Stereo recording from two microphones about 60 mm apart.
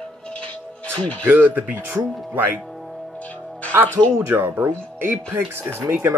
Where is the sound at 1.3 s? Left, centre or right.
Right.